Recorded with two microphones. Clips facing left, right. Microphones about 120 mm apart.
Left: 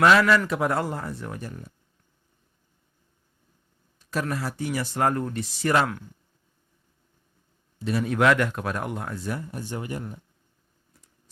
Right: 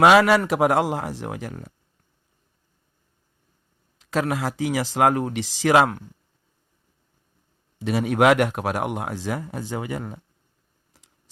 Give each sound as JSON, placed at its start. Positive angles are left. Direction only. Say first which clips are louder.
{"t": 0.0, "sound": "a man's voice", "louder": "right 3 dB", "side_deg": -65}
{"t": 4.0, "sound": "speech", "louder": "right 5 dB", "side_deg": -85}
{"t": 7.9, "sound": "speech", "louder": "right 3 dB", "side_deg": -75}